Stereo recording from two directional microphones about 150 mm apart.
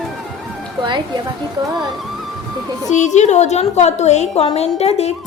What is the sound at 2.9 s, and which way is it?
A woman's voice, 55° left (ahead or behind).